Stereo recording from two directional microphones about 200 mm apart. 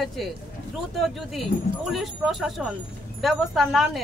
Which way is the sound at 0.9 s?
Centre (ahead or behind).